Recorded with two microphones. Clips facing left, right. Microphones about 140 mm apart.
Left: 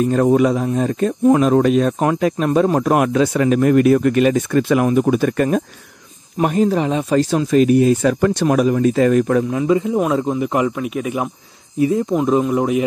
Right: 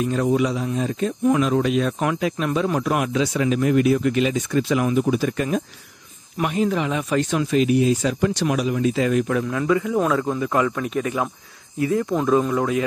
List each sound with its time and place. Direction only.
0.0 s speech: 45° left (ahead or behind)
6.3 s speech: 40° left (ahead or behind)
9.5 s speech: 25° left (ahead or behind)
11.8 s speech: 20° left (ahead or behind)